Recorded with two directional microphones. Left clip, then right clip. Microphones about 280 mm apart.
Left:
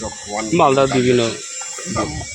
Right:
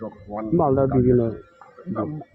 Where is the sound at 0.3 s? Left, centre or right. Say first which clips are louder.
Left 6 dB; centre.